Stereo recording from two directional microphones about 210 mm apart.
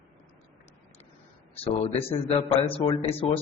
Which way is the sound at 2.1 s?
25° left (ahead or behind).